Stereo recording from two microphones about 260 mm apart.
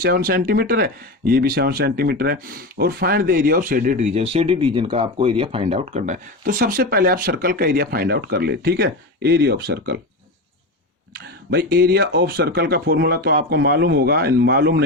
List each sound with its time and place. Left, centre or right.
0.0 s speech: right
11.1 s speech: right